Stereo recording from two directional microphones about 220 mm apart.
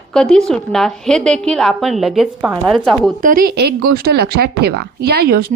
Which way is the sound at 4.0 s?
45° right (ahead or behind).